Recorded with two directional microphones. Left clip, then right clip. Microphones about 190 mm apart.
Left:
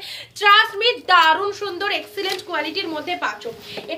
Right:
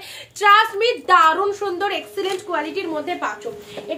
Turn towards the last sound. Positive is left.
turn(degrees=-15)  # may be behind; listen again after turning